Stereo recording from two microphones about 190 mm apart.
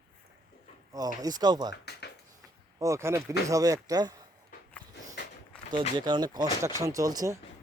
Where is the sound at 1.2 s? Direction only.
20° right (ahead or behind).